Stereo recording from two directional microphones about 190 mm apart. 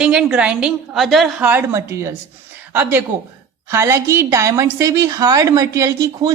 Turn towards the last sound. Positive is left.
turn(degrees=-15)  # may be behind; listen again after turning